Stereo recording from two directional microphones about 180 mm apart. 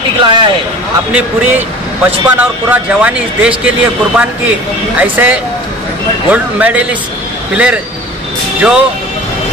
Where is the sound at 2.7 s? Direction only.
10° right (ahead or behind).